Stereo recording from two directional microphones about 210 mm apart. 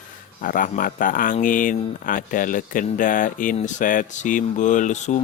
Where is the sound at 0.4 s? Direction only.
40° left (ahead or behind).